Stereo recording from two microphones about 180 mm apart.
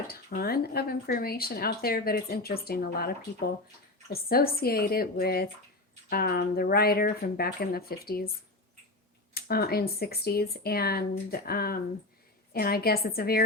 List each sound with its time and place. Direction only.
0.1 s speech: 60° left (ahead or behind)
9.3 s speech: 60° left (ahead or behind)